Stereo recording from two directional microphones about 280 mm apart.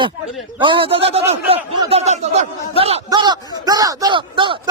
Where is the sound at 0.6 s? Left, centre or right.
Centre.